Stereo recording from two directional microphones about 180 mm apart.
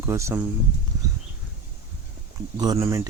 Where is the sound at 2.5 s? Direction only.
20° right (ahead or behind).